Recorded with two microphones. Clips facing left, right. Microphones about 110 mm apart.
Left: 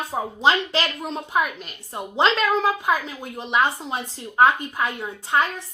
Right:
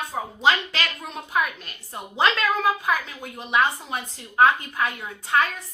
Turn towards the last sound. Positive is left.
turn(degrees=20)  # may be behind; listen again after turning